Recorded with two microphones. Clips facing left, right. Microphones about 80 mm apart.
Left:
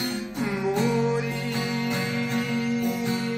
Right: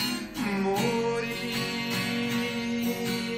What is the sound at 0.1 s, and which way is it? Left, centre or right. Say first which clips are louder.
Music: left 2 dB; centre.